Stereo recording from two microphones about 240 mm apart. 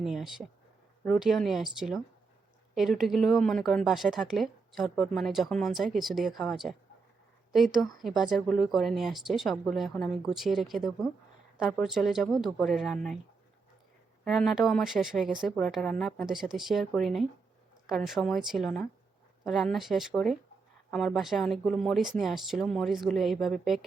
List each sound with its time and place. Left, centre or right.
0.0 s a woman's voice: centre
14.3 s a woman's voice: centre